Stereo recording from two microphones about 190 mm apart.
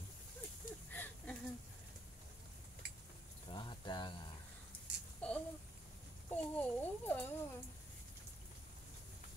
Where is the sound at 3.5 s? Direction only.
25° left (ahead or behind).